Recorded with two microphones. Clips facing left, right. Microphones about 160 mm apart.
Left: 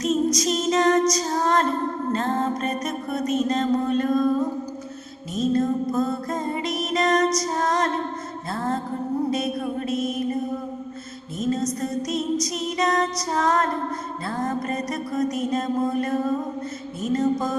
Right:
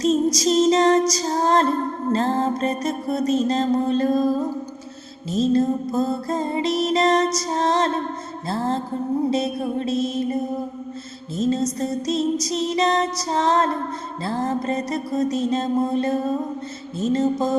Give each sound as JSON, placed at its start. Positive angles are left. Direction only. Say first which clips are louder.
{"t": 0.0, "sound": "music", "louder": "right 3 dB", "side_deg": -30}
{"t": 11.3, "sound": "music", "louder": "right 3 dB", "side_deg": -30}